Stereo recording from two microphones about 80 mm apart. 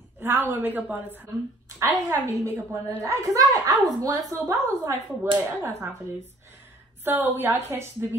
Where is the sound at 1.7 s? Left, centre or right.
Right.